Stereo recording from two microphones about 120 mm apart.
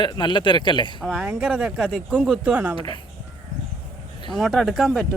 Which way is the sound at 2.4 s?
10° right (ahead or behind).